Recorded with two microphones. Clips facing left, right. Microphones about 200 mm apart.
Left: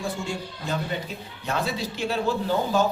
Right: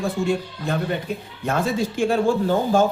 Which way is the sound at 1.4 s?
50° right (ahead or behind).